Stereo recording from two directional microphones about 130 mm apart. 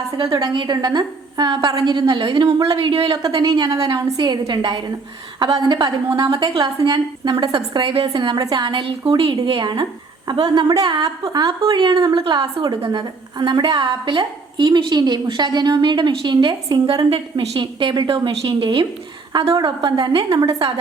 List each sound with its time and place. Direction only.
0.3 s a woman's voice: 35° right (ahead or behind)
3.2 s a woman's voice: 30° right (ahead or behind)
17.1 s a woman's voice: 45° right (ahead or behind)